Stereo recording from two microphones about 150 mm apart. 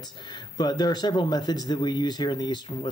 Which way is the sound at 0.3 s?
30° left (ahead or behind).